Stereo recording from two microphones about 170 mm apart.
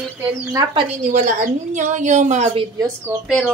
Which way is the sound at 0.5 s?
20° right (ahead or behind).